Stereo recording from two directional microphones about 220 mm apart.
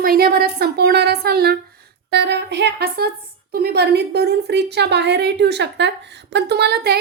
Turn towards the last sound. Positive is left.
turn(degrees=-45)  # may be behind; listen again after turning